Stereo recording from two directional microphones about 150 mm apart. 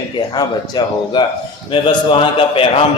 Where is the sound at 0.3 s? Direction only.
30° left (ahead or behind).